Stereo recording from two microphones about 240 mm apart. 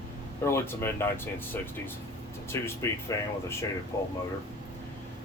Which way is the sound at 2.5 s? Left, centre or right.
Centre.